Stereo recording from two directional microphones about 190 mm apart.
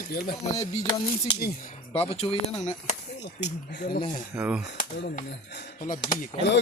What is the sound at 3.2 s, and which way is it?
Speech, 60° left (ahead or behind).